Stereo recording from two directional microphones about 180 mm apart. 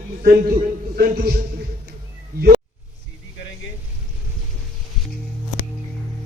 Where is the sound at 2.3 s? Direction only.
55° right (ahead or behind).